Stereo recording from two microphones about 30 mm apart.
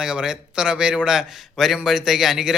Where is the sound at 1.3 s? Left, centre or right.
Centre.